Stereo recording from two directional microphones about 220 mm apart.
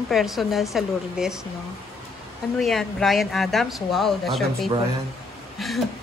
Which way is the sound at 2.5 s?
Centre (ahead or behind).